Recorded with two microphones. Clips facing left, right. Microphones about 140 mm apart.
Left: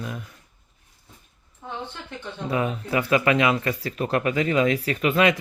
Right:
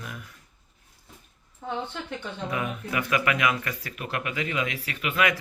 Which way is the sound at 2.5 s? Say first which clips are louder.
Left 7 dB; 30° left (ahead or behind).